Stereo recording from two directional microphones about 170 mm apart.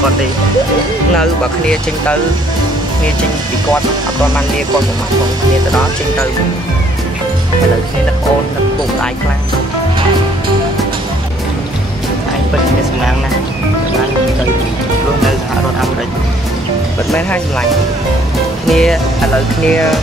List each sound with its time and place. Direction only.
1.1 s speech: 5° left (ahead or behind)
17.1 s speech: 5° left (ahead or behind)
18.7 s speech: centre (ahead or behind)